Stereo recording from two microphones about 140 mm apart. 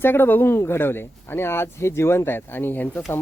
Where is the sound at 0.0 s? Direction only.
15° left (ahead or behind).